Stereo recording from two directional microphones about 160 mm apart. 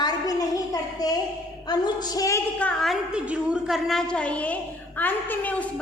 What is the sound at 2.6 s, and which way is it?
A woman's voice, 5° left (ahead or behind).